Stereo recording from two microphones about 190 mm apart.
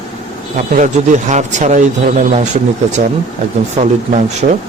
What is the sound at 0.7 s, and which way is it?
Speech, 40° right (ahead or behind).